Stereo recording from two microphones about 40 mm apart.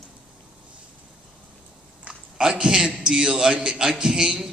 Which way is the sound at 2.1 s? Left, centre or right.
Centre.